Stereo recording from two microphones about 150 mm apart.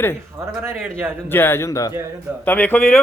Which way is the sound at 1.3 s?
15° left (ahead or behind).